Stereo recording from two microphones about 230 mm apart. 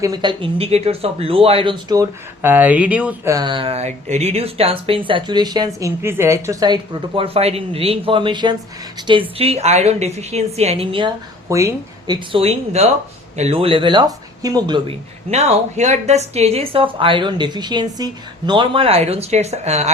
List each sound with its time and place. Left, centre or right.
0.0 s a woman's voice: centre